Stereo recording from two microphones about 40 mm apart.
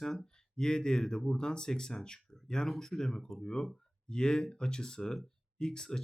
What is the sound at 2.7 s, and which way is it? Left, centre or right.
Speech, centre.